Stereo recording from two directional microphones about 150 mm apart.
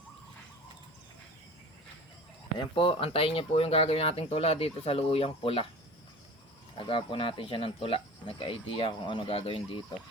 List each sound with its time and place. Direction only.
2.6 s speech: 35° left (ahead or behind)
6.7 s speech: 35° left (ahead or behind)